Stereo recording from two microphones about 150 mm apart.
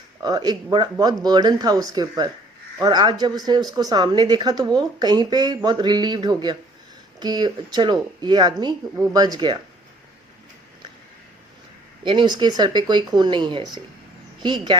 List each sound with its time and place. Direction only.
0.2 s speech: 25° right (ahead or behind)
12.0 s speech: 30° right (ahead or behind)